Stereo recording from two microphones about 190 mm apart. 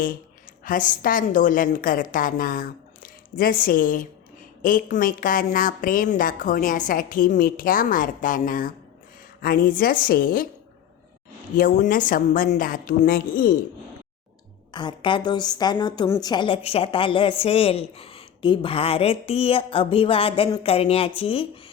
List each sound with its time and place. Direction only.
0.6 s a woman's voice: 45° left (ahead or behind)
11.5 s a woman's voice: 45° left (ahead or behind)
14.7 s a woman's voice: 25° left (ahead or behind)